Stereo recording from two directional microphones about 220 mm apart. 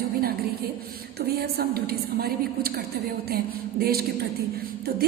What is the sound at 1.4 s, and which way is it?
A woman's voice, 45° right (ahead or behind).